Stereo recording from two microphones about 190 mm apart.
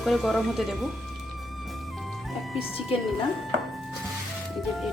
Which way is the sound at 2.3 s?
Centre (ahead or behind).